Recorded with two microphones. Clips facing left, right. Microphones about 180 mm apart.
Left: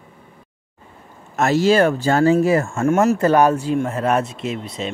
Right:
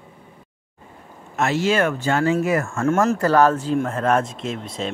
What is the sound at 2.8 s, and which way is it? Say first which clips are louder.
Speech: left 3 dB; 10° left (ahead or behind).